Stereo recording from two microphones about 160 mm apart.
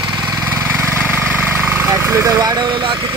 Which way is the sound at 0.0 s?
25° right (ahead or behind).